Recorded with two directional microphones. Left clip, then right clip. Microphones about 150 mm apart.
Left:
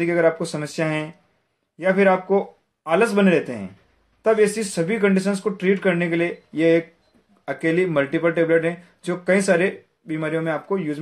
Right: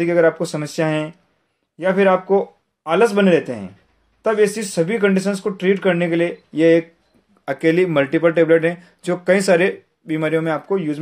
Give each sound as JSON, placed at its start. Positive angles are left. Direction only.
{"t": 0.0, "sound": "speech", "side_deg": -35}